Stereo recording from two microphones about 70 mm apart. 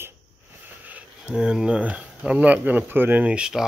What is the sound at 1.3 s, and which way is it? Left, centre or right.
Speech, centre.